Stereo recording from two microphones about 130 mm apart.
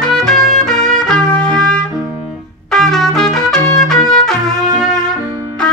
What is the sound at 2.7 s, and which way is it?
Trumpet, 5° left (ahead or behind).